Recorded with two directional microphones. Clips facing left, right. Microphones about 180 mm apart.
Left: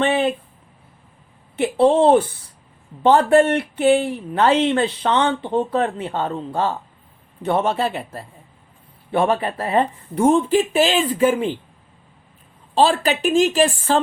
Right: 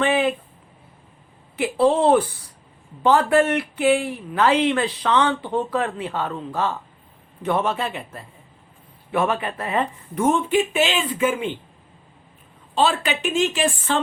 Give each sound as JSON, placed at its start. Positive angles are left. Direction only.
{"t": 0.0, "sound": "a sound", "side_deg": 30}
{"t": 1.5, "sound": "speech", "side_deg": 25}
{"t": 12.7, "sound": "speech", "side_deg": 35}